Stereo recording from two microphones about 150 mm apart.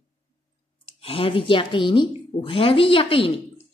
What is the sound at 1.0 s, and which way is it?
A woman's voice, 40° left (ahead or behind).